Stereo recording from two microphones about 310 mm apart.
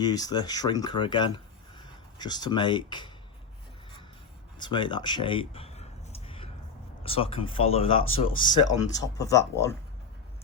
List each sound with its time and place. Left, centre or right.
0.0 s speech: centre
4.6 s a sound: centre
7.0 s speech: centre